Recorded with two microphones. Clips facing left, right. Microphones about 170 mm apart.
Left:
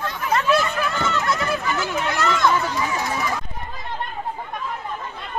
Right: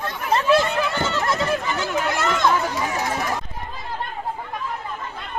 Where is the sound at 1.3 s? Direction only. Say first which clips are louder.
Right 1 dB; 25° right (ahead or behind).